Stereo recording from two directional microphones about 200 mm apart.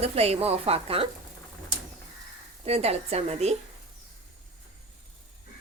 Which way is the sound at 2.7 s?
30° right (ahead or behind).